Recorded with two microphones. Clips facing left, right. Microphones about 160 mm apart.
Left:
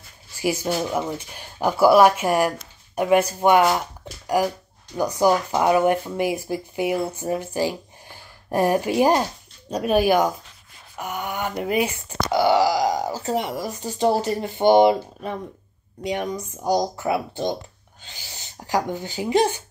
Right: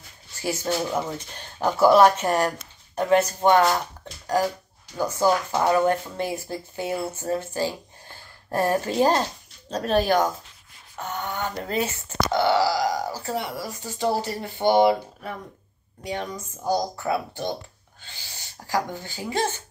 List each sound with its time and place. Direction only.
0.4 s speech: 10° left (ahead or behind)